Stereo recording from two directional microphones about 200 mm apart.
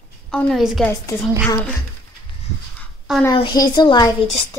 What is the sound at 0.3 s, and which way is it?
Speech, centre (ahead or behind).